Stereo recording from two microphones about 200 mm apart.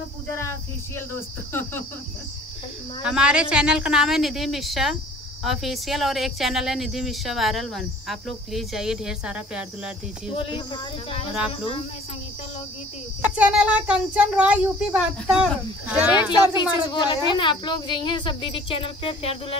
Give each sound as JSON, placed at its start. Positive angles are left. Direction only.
{"t": 1.5, "sound": "cricket", "side_deg": 10}
{"t": 3.0, "sound": "speech", "side_deg": -5}
{"t": 10.3, "sound": "speech", "side_deg": 25}
{"t": 13.2, "sound": "a child's voice", "side_deg": -5}
{"t": 16.2, "sound": "speech", "side_deg": 20}